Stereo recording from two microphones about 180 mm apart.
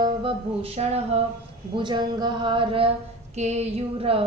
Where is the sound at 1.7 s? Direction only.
25° right (ahead or behind).